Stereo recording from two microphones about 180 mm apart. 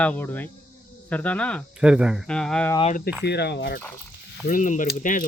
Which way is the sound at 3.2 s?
65° left (ahead or behind).